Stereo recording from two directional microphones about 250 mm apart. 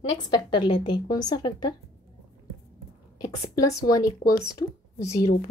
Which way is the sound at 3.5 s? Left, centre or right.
Centre.